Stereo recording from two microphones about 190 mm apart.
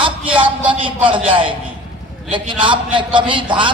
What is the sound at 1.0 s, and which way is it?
A man's voice, 25° right (ahead or behind).